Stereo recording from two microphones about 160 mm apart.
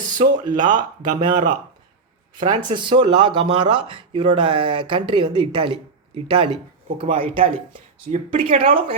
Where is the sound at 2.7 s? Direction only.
30° right (ahead or behind).